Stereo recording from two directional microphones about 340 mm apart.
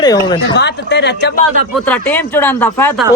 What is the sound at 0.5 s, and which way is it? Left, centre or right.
Speech, left.